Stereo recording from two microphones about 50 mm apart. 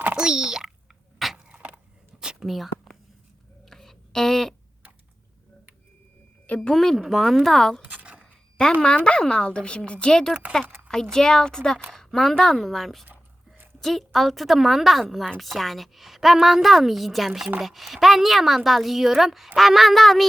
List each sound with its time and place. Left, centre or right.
0.2 s a child's voice: centre
1.5 s a sound: right
2.5 s whispering: centre
3.7 s a sound: centre
6.6 s a woman's voice: centre
7.8 s zipper: right
8.6 s a woman's voice: centre